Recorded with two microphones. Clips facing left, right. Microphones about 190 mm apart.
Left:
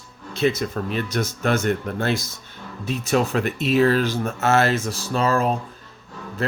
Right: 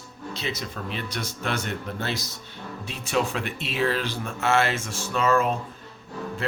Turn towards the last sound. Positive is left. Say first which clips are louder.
# left 3 dB
turn(degrees=40)  # may be behind; listen again after turning